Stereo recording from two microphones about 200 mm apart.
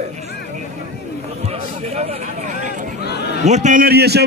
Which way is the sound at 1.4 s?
30° right (ahead or behind).